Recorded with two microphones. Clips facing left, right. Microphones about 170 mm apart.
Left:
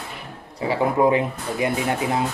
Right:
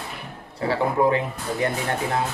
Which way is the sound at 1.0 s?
15° left (ahead or behind).